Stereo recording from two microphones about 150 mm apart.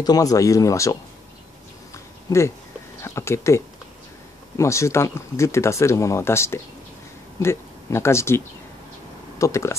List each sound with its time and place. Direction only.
0.0 s speech: 25° left (ahead or behind)
2.2 s speech: 20° left (ahead or behind)
9.4 s speech: 20° left (ahead or behind)